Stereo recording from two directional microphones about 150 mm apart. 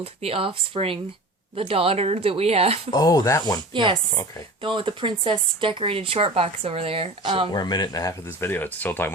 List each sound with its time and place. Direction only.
0.0 s speech: 40° right (ahead or behind)
2.9 s speech: 25° left (ahead or behind)
4.6 s speech: 35° right (ahead or behind)
7.5 s speech: 25° left (ahead or behind)